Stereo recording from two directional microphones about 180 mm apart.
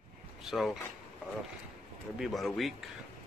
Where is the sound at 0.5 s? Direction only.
Centre (ahead or behind).